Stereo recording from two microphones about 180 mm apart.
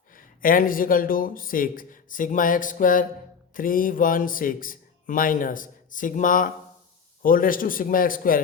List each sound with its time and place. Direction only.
0.4 s speech: 50° left (ahead or behind)